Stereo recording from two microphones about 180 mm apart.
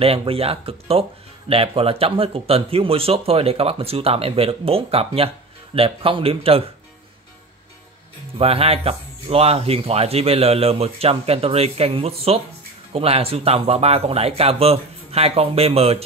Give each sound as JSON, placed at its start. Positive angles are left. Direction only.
{"t": 0.0, "sound": "speech", "side_deg": -30}
{"t": 8.4, "sound": "speech", "side_deg": -35}